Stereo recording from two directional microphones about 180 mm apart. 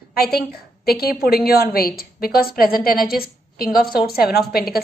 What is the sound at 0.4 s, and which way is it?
A woman's voice, 60° left (ahead or behind).